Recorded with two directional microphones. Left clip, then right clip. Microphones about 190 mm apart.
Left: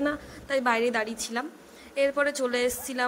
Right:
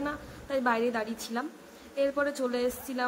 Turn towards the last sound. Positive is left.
turn(degrees=35)  # may be behind; listen again after turning